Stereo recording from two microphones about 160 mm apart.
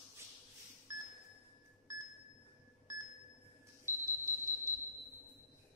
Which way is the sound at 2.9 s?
20° right (ahead or behind).